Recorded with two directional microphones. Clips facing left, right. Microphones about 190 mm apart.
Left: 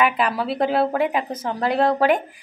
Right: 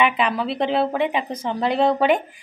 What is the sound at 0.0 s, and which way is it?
Speech, 5° left (ahead or behind).